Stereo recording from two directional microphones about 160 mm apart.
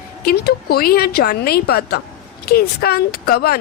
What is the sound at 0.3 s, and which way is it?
Speech, 85° left.